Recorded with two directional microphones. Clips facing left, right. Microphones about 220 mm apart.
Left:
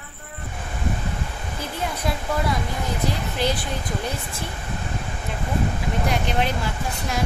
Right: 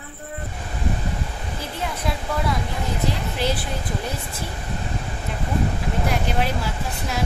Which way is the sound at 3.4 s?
5° right (ahead or behind).